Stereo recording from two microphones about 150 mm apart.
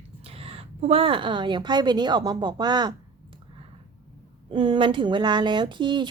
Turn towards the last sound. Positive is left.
turn(degrees=-30)  # may be behind; listen again after turning